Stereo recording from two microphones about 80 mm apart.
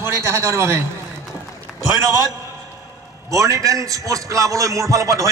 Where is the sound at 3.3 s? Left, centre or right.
Right.